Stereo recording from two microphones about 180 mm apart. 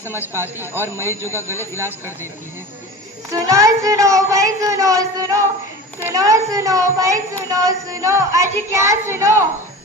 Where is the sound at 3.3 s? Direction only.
15° right (ahead or behind).